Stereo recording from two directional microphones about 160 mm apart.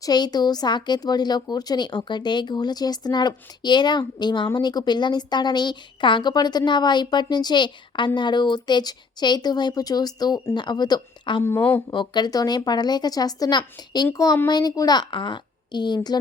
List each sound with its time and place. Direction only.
0.0 s speech: 25° left (ahead or behind)
11.4 s speech: 15° left (ahead or behind)
11.9 s speech: 25° left (ahead or behind)